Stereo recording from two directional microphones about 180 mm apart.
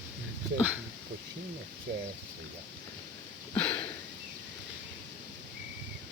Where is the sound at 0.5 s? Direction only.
10° right (ahead or behind).